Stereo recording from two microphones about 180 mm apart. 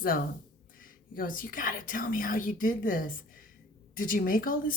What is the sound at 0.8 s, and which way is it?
Speech, 50° left (ahead or behind).